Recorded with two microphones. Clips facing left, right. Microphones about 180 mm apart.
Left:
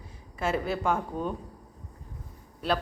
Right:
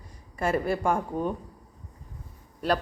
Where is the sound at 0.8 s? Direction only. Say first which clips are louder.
Right 2 dB; 10° right (ahead or behind).